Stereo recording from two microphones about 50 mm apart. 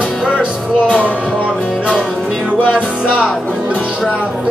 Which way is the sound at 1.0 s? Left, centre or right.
Left.